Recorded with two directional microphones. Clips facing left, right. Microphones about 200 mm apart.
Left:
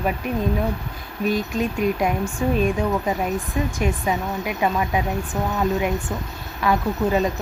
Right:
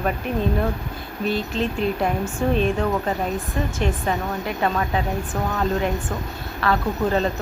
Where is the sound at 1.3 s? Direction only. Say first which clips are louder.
Left 1 dB; 10° left (ahead or behind).